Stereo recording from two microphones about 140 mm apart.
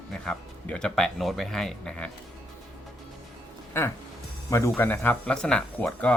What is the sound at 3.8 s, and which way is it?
Speech, 20° left (ahead or behind).